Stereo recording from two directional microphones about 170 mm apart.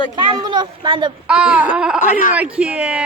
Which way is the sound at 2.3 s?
10° right (ahead or behind).